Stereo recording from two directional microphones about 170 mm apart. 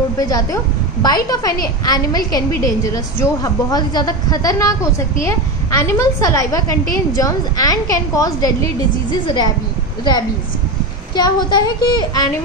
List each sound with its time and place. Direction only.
0.2 s a woman's voice: 20° left (ahead or behind)
11.1 s a woman's voice: 25° left (ahead or behind)